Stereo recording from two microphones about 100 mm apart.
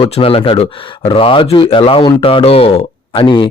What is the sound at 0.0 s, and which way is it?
Speech, 70° left (ahead or behind).